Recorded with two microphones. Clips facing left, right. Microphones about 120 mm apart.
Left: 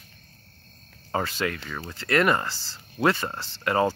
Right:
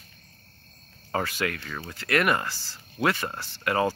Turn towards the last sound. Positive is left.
turn(degrees=25)  # may be behind; listen again after turning